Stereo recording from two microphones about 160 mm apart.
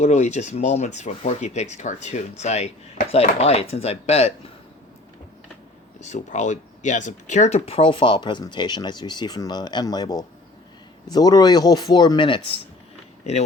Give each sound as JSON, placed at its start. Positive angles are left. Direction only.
{"t": 0.0, "sound": "speech", "side_deg": 45}
{"t": 6.1, "sound": "speech", "side_deg": 50}